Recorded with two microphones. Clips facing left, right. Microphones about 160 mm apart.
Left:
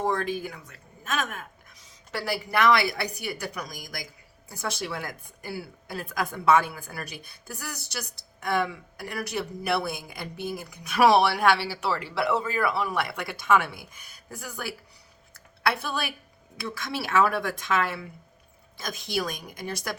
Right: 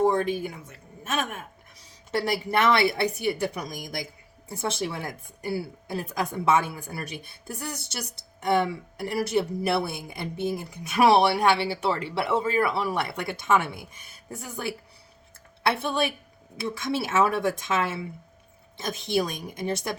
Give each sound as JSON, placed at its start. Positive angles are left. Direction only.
{"t": 0.1, "sound": "a woman's voice", "side_deg": -25}